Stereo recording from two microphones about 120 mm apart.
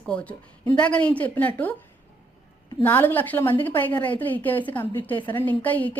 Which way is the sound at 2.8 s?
15° left (ahead or behind).